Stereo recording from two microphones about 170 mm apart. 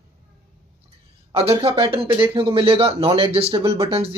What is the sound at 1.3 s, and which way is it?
Speech, 35° right (ahead or behind).